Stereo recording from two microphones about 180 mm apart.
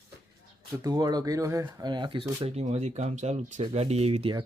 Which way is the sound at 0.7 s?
20° right (ahead or behind).